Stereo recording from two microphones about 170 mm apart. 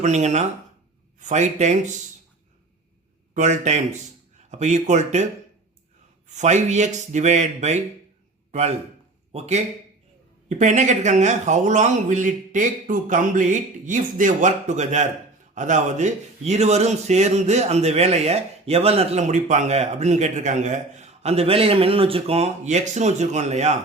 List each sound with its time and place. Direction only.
0.0 s speech: 45° right (ahead or behind)
3.3 s speech: 45° right (ahead or behind)
6.2 s speech: 45° right (ahead or behind)
10.6 s speech: 45° right (ahead or behind)